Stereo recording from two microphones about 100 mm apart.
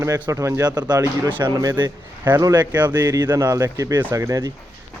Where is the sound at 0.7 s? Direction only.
40° right (ahead or behind).